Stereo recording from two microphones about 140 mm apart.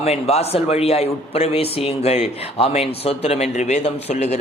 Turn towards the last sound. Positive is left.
turn(degrees=50)  # may be behind; listen again after turning